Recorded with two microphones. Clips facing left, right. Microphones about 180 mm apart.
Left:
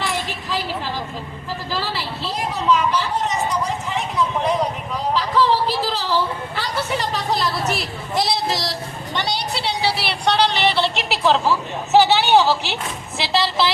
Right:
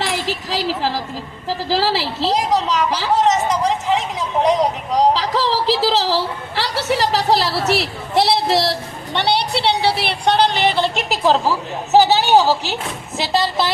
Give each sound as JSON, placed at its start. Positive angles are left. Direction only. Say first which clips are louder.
{"t": 0.0, "sound": "a woman's voice", "louder": "right 3 dB", "side_deg": -90}
{"t": 6.6, "sound": "a woman's voice", "louder": "right 6 dB", "side_deg": -75}